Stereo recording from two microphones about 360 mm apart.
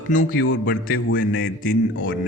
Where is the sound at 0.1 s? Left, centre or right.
Left.